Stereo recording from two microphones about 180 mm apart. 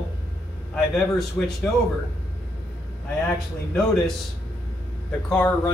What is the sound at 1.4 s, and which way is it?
Speech, 5° left (ahead or behind).